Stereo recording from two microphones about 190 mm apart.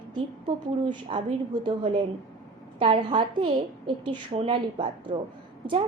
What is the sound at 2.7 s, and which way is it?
A woman's voice, 25° right (ahead or behind).